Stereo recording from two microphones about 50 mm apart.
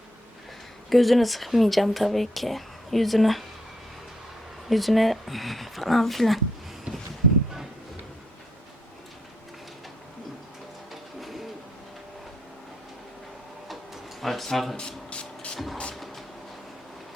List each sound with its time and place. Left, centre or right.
0.9 s speech: centre
4.7 s speech: centre
11.2 s bird: centre
13.7 s a sound: centre
14.8 s rub: centre
15.5 s vehicle: centre